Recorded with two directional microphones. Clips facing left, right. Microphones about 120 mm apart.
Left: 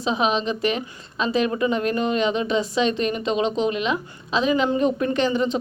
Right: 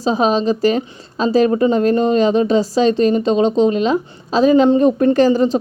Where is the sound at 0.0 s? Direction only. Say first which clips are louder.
Right 7 dB; 35° right (ahead or behind).